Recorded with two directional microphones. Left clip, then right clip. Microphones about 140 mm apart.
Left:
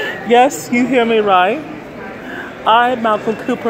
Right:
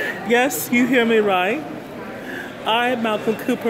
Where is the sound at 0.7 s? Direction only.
10° right (ahead or behind).